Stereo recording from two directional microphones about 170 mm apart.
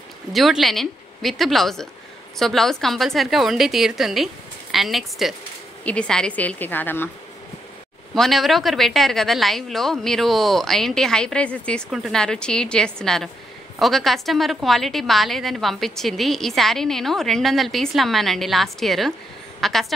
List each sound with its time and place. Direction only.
0.3 s a woman's voice: centre (ahead or behind)
8.1 s a woman's voice: centre (ahead or behind)